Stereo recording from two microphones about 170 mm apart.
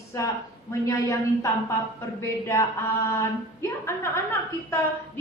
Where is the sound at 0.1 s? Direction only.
15° left (ahead or behind).